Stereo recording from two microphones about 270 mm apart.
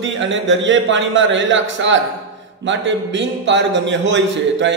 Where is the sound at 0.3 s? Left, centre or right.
Right.